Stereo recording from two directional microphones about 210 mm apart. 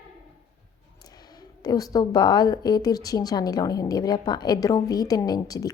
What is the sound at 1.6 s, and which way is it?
A woman's voice, 20° left (ahead or behind).